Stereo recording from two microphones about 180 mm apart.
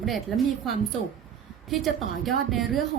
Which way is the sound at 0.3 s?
Centre (ahead or behind).